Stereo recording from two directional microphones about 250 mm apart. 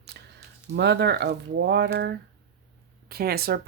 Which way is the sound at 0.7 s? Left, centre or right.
Right.